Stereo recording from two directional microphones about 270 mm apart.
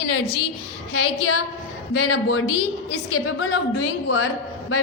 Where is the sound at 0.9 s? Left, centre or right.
Left.